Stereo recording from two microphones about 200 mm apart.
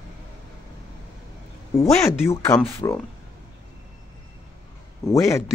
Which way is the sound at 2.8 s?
20° left (ahead or behind).